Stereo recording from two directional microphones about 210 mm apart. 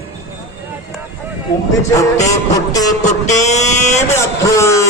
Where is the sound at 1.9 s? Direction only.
15° left (ahead or behind).